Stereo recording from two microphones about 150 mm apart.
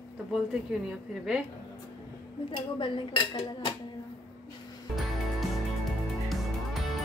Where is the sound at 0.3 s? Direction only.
5° right (ahead or behind).